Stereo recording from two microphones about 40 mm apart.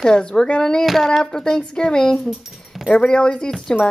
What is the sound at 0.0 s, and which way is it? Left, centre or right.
Speech, centre.